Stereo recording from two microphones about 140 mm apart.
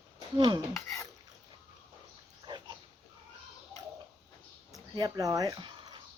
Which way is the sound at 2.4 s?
30° right (ahead or behind).